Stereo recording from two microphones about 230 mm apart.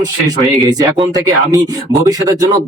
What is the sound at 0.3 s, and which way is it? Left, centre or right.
Speech, centre.